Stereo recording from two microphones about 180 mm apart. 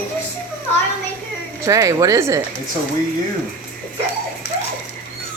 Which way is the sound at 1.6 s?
15° right (ahead or behind).